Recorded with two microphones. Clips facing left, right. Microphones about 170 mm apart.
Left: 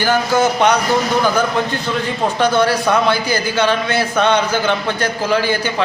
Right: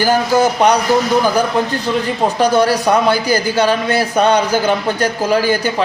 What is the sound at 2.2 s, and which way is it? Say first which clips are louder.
A man's voice: right 2 dB; 40° right (ahead or behind).